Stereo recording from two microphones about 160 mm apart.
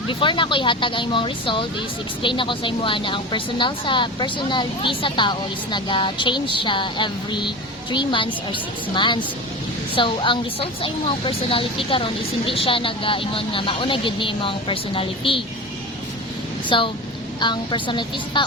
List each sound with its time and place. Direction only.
0.1 s a woman's voice: 30° left (ahead or behind)
16.6 s a woman's voice: 30° left (ahead or behind)